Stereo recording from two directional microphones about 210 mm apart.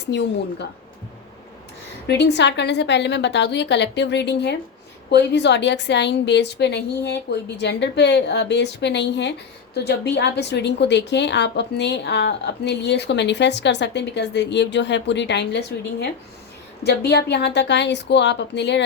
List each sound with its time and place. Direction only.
0.1 s a woman's voice: 55° left (ahead or behind)
2.0 s a woman's voice: 55° left (ahead or behind)